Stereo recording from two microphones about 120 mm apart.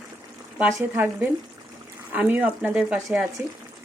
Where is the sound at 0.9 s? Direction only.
15° right (ahead or behind).